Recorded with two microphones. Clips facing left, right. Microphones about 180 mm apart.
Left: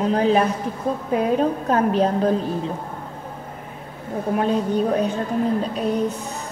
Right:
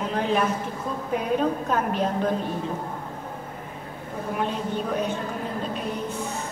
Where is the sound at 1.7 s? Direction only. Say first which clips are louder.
Left 6 dB; 35° left (ahead or behind).